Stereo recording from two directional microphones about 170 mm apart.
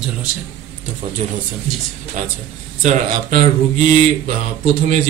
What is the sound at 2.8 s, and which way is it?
Speech, 50° right (ahead or behind).